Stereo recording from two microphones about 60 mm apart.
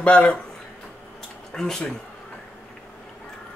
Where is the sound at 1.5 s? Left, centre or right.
Centre.